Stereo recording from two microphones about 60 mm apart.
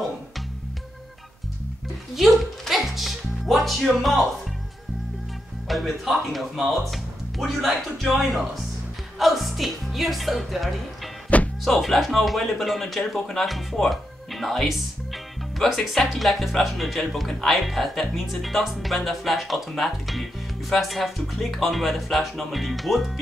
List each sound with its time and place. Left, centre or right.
2.1 s music: centre
4.0 s speech: centre
5.7 s speech: centre
11.3 s music: left
11.6 s speech: centre